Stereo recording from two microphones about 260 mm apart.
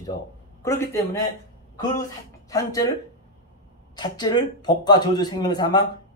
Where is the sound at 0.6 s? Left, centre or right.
Centre.